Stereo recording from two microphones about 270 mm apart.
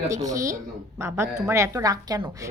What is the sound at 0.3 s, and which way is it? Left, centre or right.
Speech, centre.